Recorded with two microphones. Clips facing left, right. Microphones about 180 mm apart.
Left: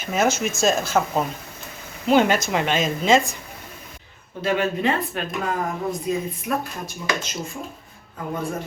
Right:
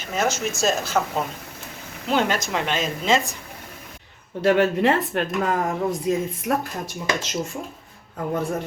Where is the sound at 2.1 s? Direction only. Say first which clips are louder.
Left 4 dB; 5° left (ahead or behind).